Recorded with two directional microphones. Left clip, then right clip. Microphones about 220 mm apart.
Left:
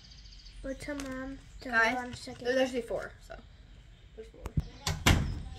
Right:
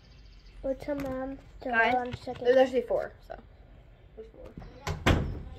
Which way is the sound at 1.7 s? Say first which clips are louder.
Right 3 dB; 10° left (ahead or behind).